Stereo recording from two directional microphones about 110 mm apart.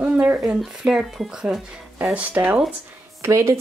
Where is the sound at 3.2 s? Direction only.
25° right (ahead or behind).